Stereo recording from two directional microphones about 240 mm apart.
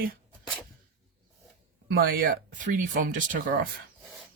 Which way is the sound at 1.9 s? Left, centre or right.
Right.